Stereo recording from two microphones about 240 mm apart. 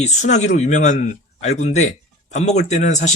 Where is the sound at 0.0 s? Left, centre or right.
Left.